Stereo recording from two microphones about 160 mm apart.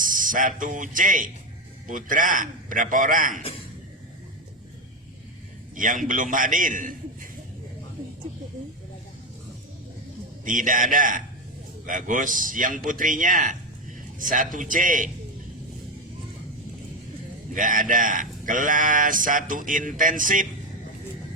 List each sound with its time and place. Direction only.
0.0 s speech: 55° right (ahead or behind)
5.7 s speech: 55° right (ahead or behind)
10.4 s speech: 55° right (ahead or behind)
17.5 s speech: 55° right (ahead or behind)